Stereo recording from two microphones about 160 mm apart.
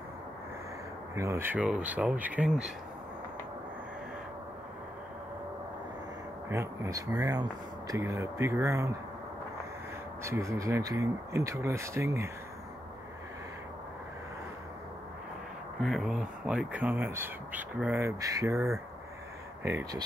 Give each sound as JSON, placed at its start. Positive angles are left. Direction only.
{"t": 1.1, "sound": "speech", "side_deg": -20}
{"t": 6.5, "sound": "speech", "side_deg": -15}
{"t": 10.2, "sound": "speech", "side_deg": -20}
{"t": 15.8, "sound": "speech", "side_deg": 0}